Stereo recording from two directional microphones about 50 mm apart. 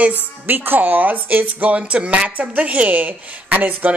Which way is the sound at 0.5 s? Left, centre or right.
Right.